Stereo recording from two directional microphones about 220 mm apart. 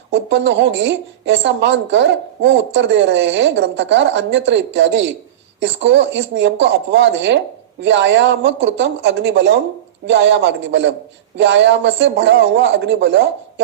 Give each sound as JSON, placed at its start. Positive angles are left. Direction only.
{"t": 0.1, "sound": "speech", "side_deg": -55}